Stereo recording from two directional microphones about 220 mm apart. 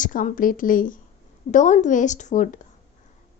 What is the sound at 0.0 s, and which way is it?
Speech, 35° left (ahead or behind).